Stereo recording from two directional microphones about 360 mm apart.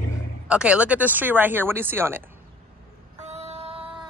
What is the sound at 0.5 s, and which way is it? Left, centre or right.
Speech, centre.